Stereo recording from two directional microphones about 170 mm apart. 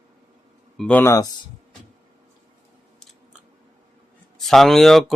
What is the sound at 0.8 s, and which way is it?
Speech, 10° left (ahead or behind).